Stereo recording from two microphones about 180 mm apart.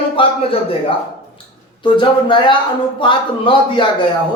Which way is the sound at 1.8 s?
25° left (ahead or behind).